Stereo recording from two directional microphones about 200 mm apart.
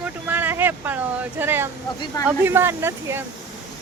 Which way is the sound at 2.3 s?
10° right (ahead or behind).